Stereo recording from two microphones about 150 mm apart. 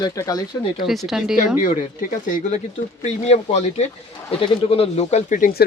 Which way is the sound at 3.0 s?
45° left (ahead or behind).